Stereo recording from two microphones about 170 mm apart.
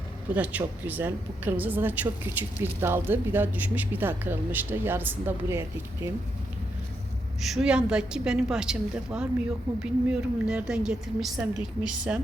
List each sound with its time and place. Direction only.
0.3 s a woman's voice: 10° right (ahead or behind)
7.4 s a woman's voice: 5° right (ahead or behind)